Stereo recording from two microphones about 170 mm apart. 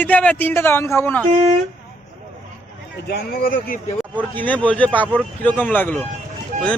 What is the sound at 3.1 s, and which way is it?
Speech, 65° left (ahead or behind).